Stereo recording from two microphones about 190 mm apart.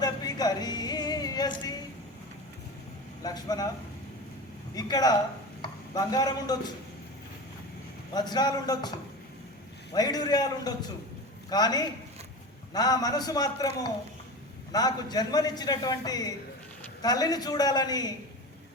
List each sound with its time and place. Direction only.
0.0 s music: 20° left (ahead or behind)
3.2 s a man's voice: 20° left (ahead or behind)
4.7 s a man's voice: 20° left (ahead or behind)
8.1 s a man's voice: 20° left (ahead or behind)